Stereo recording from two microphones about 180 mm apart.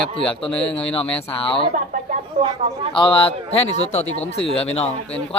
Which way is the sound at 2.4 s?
45° right (ahead or behind).